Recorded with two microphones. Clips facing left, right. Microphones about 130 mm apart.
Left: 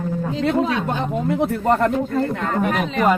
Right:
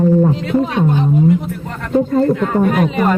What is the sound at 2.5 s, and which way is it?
Speech, 5° right (ahead or behind).